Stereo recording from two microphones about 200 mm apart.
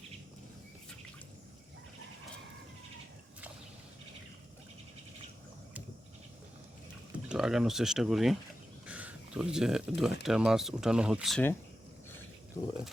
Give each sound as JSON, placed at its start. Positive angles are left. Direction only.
{"t": 7.3, "sound": "speech", "side_deg": -5}
{"t": 12.6, "sound": "speech", "side_deg": 15}